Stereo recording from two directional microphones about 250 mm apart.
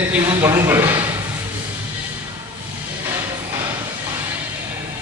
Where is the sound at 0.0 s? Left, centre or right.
Centre.